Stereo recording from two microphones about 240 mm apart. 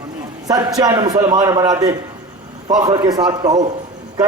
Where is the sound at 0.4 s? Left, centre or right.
Centre.